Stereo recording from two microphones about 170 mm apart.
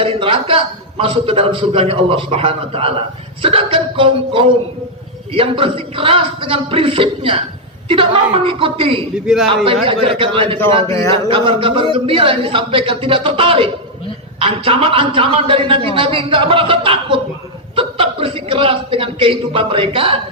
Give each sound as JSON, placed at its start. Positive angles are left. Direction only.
{"t": 0.0, "sound": "a man's voice", "side_deg": -30}
{"t": 9.2, "sound": "a man's voice", "side_deg": 0}
{"t": 9.8, "sound": "a man's voice", "side_deg": -35}
{"t": 10.8, "sound": "a man's voice", "side_deg": 15}
{"t": 11.1, "sound": "a man's voice", "side_deg": -30}